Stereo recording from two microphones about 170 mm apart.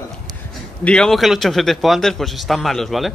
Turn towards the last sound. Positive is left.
turn(degrees=0)  # may be behind; listen again after turning